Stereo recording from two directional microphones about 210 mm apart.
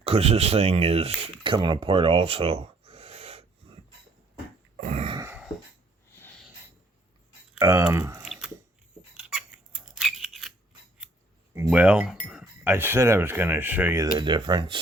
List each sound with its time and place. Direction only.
0.0 s speech: 30° right (ahead or behind)
4.8 s throat clearing: 30° right (ahead or behind)
5.1 s a sound: 10° right (ahead or behind)
6.1 s sneeze: 10° left (ahead or behind)
7.6 s speech: 15° right (ahead or behind)
8.2 s chewing: 5° right (ahead or behind)
9.1 s squeak: 5° right (ahead or behind)
11.5 s speech: 10° right (ahead or behind)